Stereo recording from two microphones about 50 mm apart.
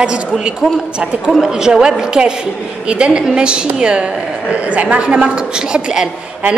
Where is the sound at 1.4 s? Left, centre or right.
Centre.